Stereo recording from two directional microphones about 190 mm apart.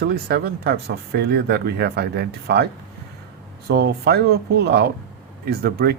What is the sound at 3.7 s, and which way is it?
Speech, 60° right (ahead or behind).